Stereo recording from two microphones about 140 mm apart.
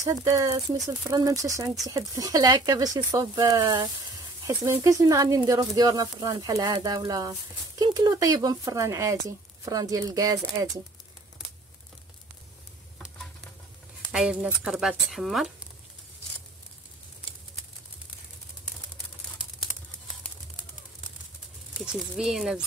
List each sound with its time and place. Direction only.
0.0 s speech: 25° right (ahead or behind)
4.8 s speech: 25° right (ahead or behind)
14.1 s speech: 5° right (ahead or behind)
22.1 s speech: centre (ahead or behind)